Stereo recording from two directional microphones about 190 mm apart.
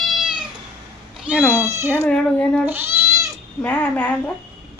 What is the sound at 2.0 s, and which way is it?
Speech, 5° left (ahead or behind).